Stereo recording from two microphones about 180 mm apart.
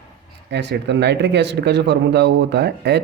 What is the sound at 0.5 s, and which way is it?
Speech, 70° right (ahead or behind).